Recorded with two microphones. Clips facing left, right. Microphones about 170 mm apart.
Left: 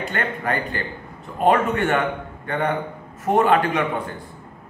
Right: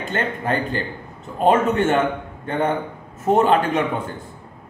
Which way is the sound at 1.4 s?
20° right (ahead or behind).